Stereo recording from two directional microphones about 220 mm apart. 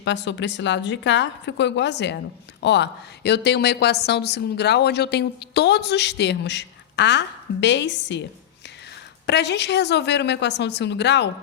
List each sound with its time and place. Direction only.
0.0 s a woman's voice: 55° left (ahead or behind)
9.2 s a woman's voice: 50° left (ahead or behind)